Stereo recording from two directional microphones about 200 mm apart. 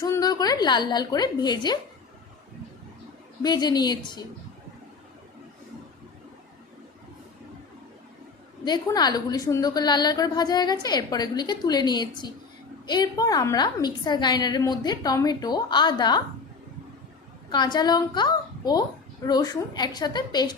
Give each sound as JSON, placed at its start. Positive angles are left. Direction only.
{"t": 0.0, "sound": "a woman's voice", "side_deg": 15}
{"t": 3.4, "sound": "a woman's voice", "side_deg": 20}
{"t": 8.6, "sound": "a woman's voice", "side_deg": 20}
{"t": 17.5, "sound": "a woman's voice", "side_deg": 20}